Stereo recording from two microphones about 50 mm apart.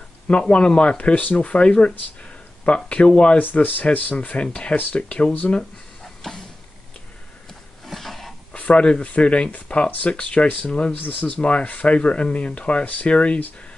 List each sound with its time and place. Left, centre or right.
0.3 s speech: left
3.3 s speech: left
5.6 s a sound: centre
7.8 s roaring cats: centre
8.5 s speech: left
11.0 s speech: left